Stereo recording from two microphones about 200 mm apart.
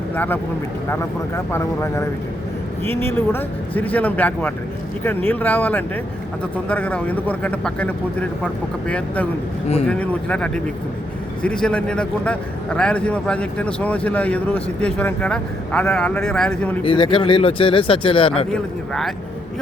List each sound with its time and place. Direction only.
1.5 s a man's voice: 10° left (ahead or behind)
16.8 s speech: 25° left (ahead or behind)
18.5 s a man's voice: centre (ahead or behind)